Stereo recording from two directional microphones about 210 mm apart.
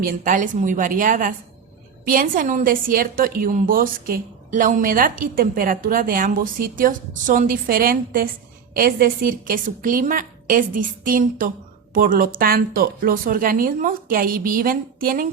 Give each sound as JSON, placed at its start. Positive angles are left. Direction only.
{"t": 0.0, "sound": "a woman's voice", "side_deg": -40}